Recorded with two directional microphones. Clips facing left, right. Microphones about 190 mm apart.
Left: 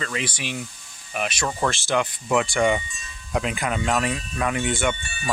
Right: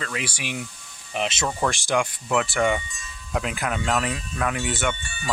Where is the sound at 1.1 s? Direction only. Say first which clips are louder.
Right 1 dB; 20° right (ahead or behind).